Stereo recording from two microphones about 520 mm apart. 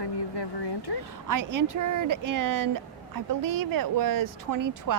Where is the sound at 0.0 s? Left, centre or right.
Left.